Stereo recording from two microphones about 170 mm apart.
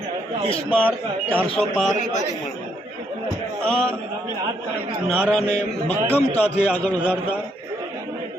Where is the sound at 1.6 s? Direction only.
5° left (ahead or behind).